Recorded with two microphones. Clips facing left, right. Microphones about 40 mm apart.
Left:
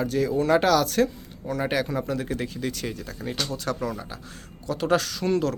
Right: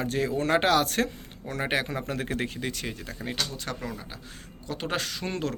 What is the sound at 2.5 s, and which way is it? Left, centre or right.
Speech, right.